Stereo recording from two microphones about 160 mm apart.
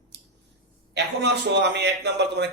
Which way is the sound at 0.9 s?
90° right.